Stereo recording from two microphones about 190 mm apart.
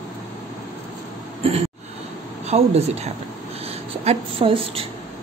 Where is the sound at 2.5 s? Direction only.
35° right (ahead or behind).